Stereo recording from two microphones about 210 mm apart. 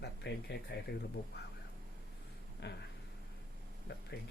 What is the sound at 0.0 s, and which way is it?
Speech, 55° left (ahead or behind).